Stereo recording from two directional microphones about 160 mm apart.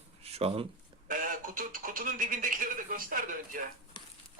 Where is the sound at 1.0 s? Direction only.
55° right (ahead or behind).